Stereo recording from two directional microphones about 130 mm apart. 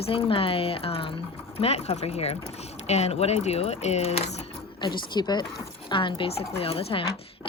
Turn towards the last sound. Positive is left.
turn(degrees=50)  # may be behind; listen again after turning